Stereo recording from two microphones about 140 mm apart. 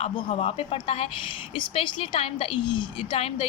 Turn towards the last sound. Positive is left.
turn(degrees=45)  # may be behind; listen again after turning